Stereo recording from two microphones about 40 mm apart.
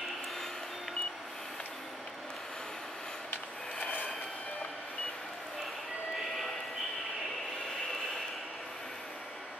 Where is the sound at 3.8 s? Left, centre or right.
Left.